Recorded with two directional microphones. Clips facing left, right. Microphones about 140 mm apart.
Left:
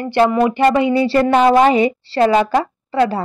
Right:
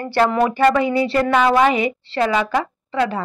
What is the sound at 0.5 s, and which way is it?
Speech, 25° left (ahead or behind).